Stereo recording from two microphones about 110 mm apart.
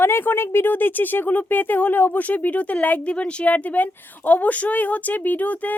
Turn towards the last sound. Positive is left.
turn(degrees=15)  # may be behind; listen again after turning